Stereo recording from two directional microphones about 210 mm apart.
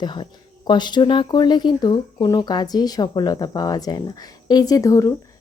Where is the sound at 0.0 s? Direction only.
20° left (ahead or behind).